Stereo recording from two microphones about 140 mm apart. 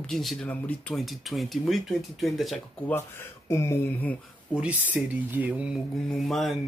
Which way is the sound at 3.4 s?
20° left (ahead or behind).